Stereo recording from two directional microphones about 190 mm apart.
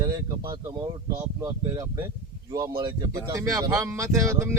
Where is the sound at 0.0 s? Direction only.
20° right (ahead or behind).